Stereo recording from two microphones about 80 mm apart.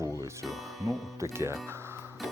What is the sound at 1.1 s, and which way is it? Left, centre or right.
Speech, right.